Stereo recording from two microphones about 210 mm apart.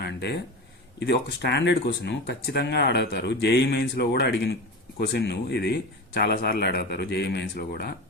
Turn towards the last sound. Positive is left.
turn(degrees=50)  # may be behind; listen again after turning